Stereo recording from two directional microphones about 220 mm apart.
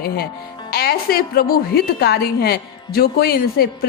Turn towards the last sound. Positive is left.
turn(degrees=45)  # may be behind; listen again after turning